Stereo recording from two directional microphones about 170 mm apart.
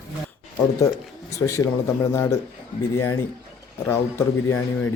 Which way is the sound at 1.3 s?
15° left (ahead or behind).